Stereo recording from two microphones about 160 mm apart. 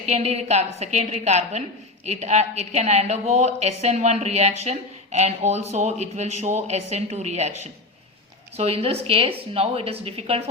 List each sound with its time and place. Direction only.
0.0 s a woman's voice: 45° right (ahead or behind)